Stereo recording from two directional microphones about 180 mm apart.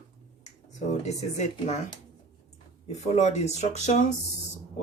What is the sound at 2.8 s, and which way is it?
Speech, 40° left (ahead or behind).